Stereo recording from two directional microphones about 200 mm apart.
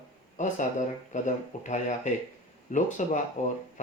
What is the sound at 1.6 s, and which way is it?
Speech, 40° left (ahead or behind).